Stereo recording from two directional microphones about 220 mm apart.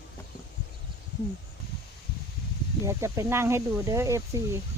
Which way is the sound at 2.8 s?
15° right (ahead or behind).